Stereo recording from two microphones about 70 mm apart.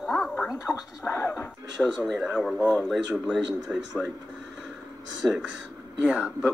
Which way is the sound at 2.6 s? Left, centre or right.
Left.